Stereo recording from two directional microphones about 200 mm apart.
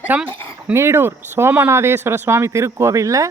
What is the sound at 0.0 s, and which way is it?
A woman's voice, 10° right (ahead or behind).